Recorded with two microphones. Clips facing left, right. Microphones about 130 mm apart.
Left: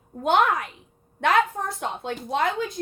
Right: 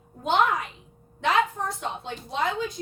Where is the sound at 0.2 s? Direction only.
55° left (ahead or behind).